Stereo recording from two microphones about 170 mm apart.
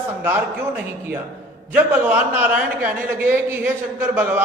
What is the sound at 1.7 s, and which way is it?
A man's voice, 10° right (ahead or behind).